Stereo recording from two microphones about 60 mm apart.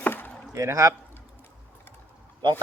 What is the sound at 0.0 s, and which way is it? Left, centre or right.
Chop, left.